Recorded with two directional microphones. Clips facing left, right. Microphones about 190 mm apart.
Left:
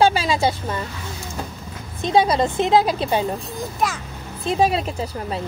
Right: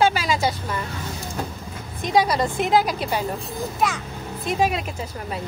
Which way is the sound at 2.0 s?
25° left (ahead or behind).